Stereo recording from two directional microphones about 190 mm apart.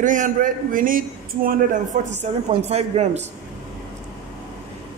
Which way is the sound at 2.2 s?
35° right (ahead or behind).